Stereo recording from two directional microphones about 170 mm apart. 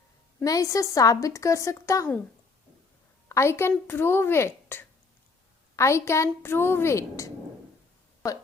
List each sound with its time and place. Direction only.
0.3 s a woman's voice: 20° left (ahead or behind)
3.2 s a woman's voice: 15° left (ahead or behind)